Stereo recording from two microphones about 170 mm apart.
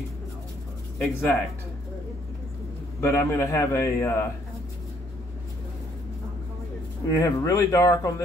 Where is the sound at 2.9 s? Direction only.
15° left (ahead or behind).